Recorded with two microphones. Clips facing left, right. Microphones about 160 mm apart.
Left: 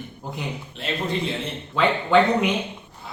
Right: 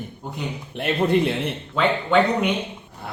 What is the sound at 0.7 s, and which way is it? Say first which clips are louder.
Speech: right 8 dB; 60° right (ahead or behind).